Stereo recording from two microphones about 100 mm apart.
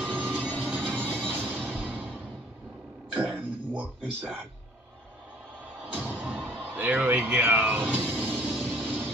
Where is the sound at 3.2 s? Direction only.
20° right (ahead or behind).